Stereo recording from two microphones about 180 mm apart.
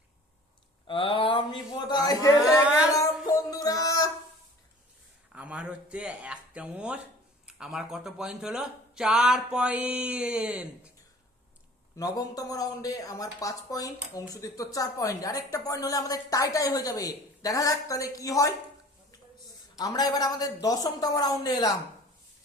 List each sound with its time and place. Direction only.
0.9 s a sound: 30° left (ahead or behind)
2.4 s speech: 5° right (ahead or behind)
2.9 s music: 20° left (ahead or behind)
5.3 s speech: 5° right (ahead or behind)
11.9 s speech: 20° left (ahead or behind)
19.8 s speech: 20° left (ahead or behind)